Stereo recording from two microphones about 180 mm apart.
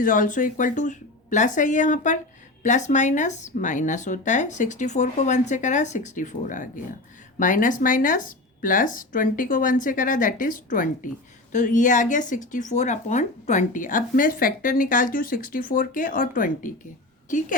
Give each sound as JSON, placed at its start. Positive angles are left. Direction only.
{"t": 0.0, "sound": "a woman's voice", "side_deg": 45}